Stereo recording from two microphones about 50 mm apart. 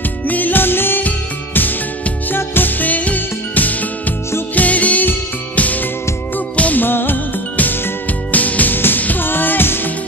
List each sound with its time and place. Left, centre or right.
0.3 s music: left
6.5 s music: left
6.8 s music: left